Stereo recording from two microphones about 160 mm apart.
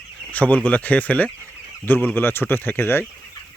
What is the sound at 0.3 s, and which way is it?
Speech, 10° left (ahead or behind).